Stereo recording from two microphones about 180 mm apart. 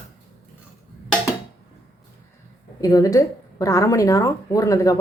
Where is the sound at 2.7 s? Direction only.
20° left (ahead or behind).